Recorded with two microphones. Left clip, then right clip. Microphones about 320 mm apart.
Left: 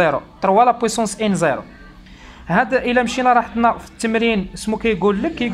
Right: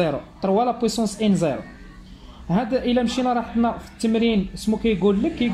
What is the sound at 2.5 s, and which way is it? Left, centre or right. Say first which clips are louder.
Speech: left 6 dB; left.